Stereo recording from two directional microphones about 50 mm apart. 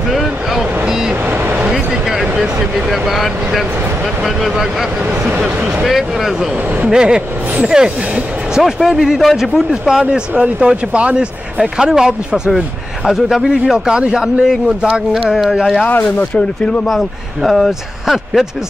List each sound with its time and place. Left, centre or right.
0.1 s vehicle: centre
1.7 s speech: centre
5.9 s speech: centre
6.9 s speech: centre
15.9 s speech: left
16.3 s speech: left
16.8 s speech: centre